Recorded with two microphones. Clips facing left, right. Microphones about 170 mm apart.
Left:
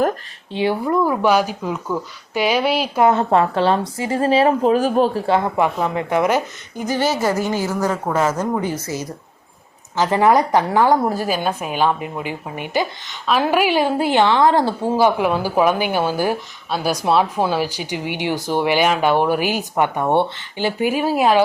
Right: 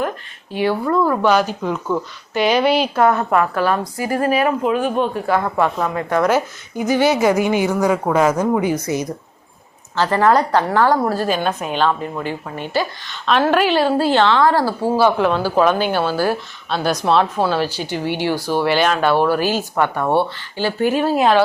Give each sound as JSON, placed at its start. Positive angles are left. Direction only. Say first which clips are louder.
{"t": 0.5, "sound": "speech", "louder": "right 1 dB", "side_deg": 20}
{"t": 2.9, "sound": "a woman's voice", "louder": "left 1 dB", "side_deg": 20}
{"t": 6.3, "sound": "a woman's voice", "louder": "right 2 dB", "side_deg": -10}
{"t": 9.9, "sound": "speech", "louder": "even", "side_deg": 15}
{"t": 11.3, "sound": "speech", "louder": "right 1 dB", "side_deg": 5}